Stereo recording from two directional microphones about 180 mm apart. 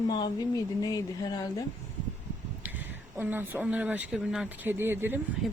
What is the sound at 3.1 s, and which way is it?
Speech, 10° right (ahead or behind).